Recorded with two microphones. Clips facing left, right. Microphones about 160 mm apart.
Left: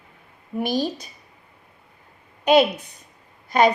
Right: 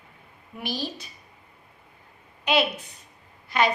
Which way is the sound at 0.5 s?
45° left (ahead or behind).